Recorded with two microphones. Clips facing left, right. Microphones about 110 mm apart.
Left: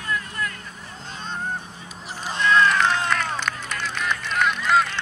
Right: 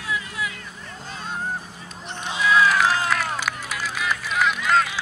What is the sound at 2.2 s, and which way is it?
Run, 5° right (ahead or behind).